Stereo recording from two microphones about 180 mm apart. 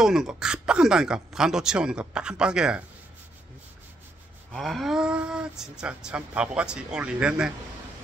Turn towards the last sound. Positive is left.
turn(degrees=-5)  # may be behind; listen again after turning